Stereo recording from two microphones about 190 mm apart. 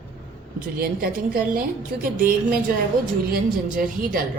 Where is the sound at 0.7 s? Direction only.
50° right (ahead or behind).